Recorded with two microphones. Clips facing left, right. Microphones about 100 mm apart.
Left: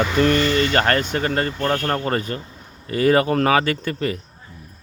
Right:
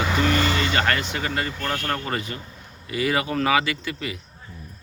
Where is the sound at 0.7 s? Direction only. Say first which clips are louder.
Left 4 dB; 45° left (ahead or behind).